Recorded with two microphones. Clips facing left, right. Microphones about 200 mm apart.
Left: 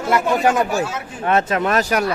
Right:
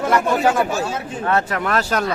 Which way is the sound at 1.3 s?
20° left (ahead or behind).